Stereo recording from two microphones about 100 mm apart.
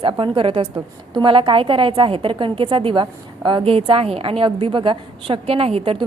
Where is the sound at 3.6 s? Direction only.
70° right (ahead or behind); by 6.0 s 85° right.